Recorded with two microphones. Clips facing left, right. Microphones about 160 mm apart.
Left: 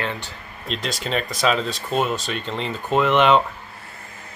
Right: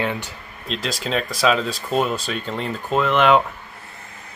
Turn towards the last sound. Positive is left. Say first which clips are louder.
# even
turn(degrees=0)  # may be behind; listen again after turning